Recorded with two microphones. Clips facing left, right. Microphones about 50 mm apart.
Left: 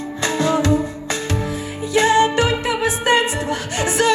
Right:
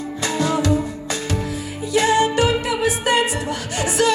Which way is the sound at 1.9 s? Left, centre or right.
Left.